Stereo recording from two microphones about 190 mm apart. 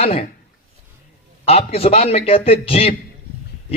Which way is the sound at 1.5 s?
30° left (ahead or behind).